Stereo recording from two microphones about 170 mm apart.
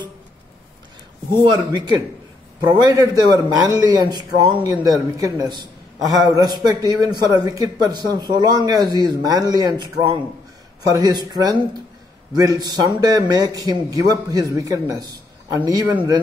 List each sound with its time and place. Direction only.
1.4 s a man's voice: 25° right (ahead or behind)